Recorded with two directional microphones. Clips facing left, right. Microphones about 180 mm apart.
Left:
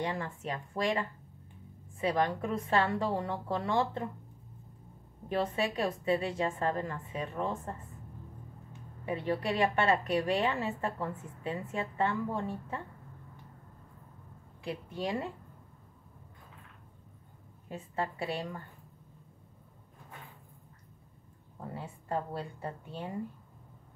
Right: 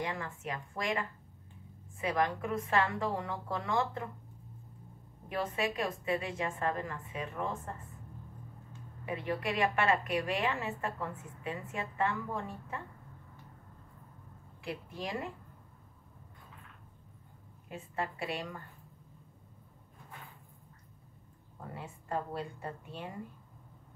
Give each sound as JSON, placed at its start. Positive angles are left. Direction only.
{"t": 0.0, "sound": "a woman's voice", "side_deg": 30}
{"t": 5.3, "sound": "a woman's voice", "side_deg": 30}
{"t": 9.0, "sound": "a woman's voice", "side_deg": 30}
{"t": 14.6, "sound": "a woman's voice", "side_deg": 25}
{"t": 17.6, "sound": "a woman's voice", "side_deg": 30}
{"t": 21.7, "sound": "a woman's voice", "side_deg": 30}